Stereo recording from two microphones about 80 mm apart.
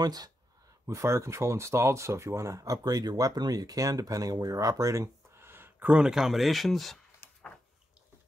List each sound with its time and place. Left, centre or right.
0.0 s speech: right
0.8 s speech: right
5.9 s speech: centre
7.2 s a sound: left